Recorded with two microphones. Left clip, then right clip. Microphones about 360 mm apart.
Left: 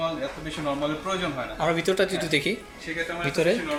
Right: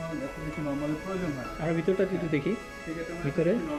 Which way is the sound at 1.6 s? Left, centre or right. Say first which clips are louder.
Left 4 dB; left.